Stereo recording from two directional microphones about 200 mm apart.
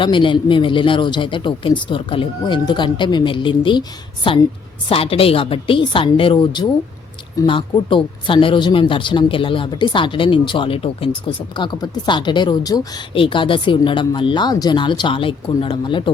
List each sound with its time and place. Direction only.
0.0 s speech: 25° left (ahead or behind)